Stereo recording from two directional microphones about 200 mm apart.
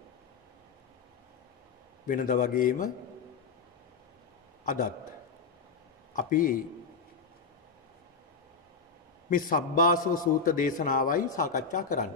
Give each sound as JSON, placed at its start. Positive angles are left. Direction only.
{"t": 2.0, "sound": "a man's voice", "side_deg": 40}
{"t": 6.1, "sound": "a man's voice", "side_deg": 40}
{"t": 9.3, "sound": "a man's voice", "side_deg": 45}